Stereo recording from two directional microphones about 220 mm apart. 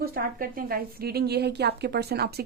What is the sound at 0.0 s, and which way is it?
A woman's voice, 40° right (ahead or behind).